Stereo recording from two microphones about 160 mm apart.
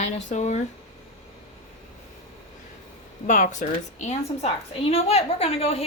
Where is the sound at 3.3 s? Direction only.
50° left (ahead or behind).